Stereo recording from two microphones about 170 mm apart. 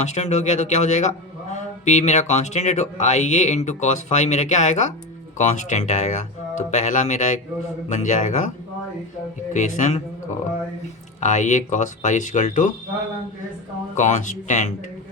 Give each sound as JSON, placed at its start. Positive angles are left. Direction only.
{"t": 0.0, "sound": "a man's voice", "side_deg": 45}
{"t": 11.2, "sound": "a man's voice", "side_deg": 45}
{"t": 13.9, "sound": "a man's voice", "side_deg": 45}